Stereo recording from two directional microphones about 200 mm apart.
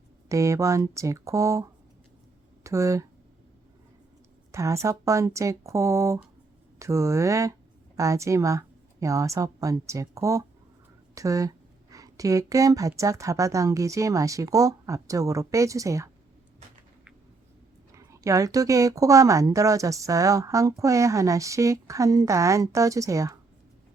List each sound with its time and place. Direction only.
0.3 s speech: 15° right (ahead or behind)
2.6 s speech: 15° right (ahead or behind)
4.5 s speech: 15° right (ahead or behind)
17.9 s speech: 15° right (ahead or behind)